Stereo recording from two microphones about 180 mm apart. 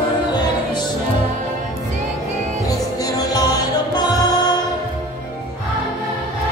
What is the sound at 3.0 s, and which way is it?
Music, 20° left (ahead or behind).